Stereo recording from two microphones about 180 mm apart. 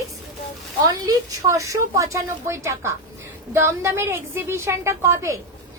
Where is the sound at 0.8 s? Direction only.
20° right (ahead or behind).